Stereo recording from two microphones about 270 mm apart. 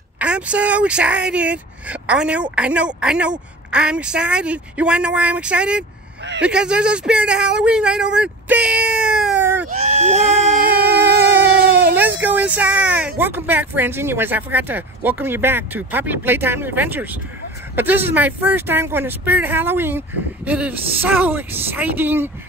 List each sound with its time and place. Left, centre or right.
0.2 s a woman's voice: centre
9.7 s a sound: right
12.2 s speech: centre